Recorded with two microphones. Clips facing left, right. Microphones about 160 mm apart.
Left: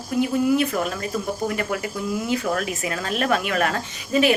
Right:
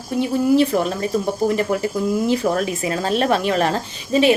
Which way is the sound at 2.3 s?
30° right (ahead or behind).